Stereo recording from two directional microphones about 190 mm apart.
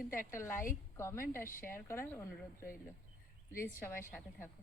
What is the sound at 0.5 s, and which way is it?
Speech, 45° left (ahead or behind).